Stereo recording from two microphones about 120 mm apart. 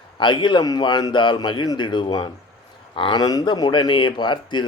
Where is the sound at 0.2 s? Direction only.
40° left (ahead or behind).